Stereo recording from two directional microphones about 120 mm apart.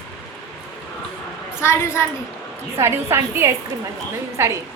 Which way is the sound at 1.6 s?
20° left (ahead or behind).